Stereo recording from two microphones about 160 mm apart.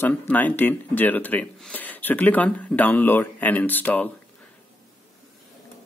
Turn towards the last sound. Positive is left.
turn(degrees=10)  # may be behind; listen again after turning